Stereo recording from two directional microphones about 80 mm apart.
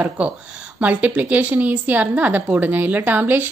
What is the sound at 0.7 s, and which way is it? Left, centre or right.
A woman's voice, centre.